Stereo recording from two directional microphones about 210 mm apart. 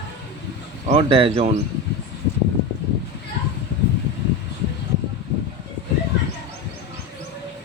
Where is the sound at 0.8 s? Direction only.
30° right (ahead or behind).